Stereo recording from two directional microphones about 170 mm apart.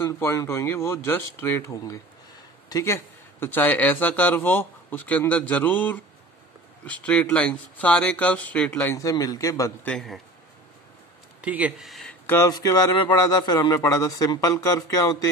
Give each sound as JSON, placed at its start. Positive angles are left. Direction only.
{"t": 0.0, "sound": "speech", "side_deg": 15}
{"t": 8.8, "sound": "a man's voice", "side_deg": 20}
{"t": 9.8, "sound": "a man's voice", "side_deg": 0}
{"t": 11.4, "sound": "speech", "side_deg": -10}
{"t": 12.3, "sound": "a man's voice", "side_deg": 20}